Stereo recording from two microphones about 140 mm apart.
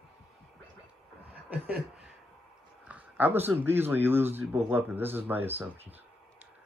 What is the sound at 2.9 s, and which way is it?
Speech, 10° right (ahead or behind).